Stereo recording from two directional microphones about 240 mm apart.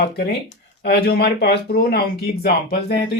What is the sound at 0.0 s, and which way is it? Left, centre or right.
Speech, left.